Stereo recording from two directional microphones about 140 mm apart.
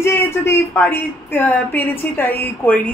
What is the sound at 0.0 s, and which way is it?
A woman's voice, 20° left (ahead or behind).